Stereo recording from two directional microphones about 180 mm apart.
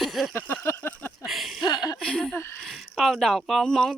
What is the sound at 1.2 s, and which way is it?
Speech, centre (ahead or behind).